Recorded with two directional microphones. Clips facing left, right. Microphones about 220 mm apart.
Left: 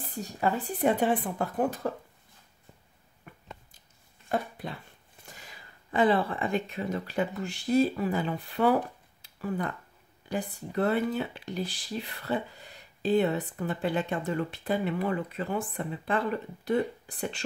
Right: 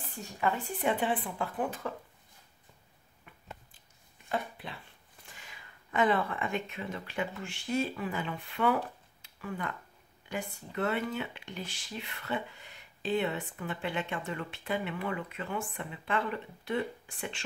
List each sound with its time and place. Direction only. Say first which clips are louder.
0.0 s speech: left 3 dB; 40° left (ahead or behind)
4.3 s a sound: left 4 dB; 45° left (ahead or behind)
5.2 s speech: left 4 dB; 40° left (ahead or behind)